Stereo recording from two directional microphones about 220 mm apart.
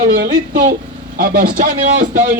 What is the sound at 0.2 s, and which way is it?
A woman's voice, 45° right (ahead or behind).